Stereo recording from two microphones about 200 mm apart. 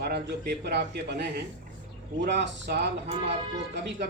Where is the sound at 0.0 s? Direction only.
55° right (ahead or behind).